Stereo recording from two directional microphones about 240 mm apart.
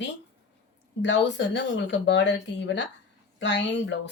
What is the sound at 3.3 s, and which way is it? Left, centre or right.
Speech, left.